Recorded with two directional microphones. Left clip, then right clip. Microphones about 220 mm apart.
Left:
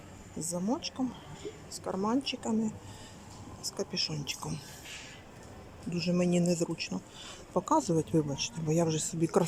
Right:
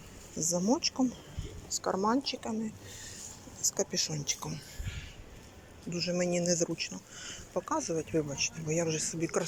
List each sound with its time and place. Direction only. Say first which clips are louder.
0.5 s speech: right 4 dB; 5° left (ahead or behind)
3.6 s speech: right 3 dB; 5° left (ahead or behind)
5.9 s speech: even; 15° left (ahead or behind)